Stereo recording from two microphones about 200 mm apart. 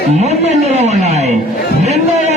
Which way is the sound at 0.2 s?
35° right (ahead or behind).